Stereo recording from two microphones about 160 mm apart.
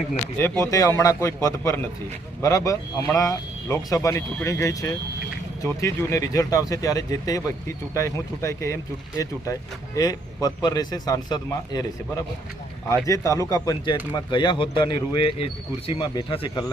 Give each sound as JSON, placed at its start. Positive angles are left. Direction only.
{"t": 0.6, "sound": "speech", "side_deg": 20}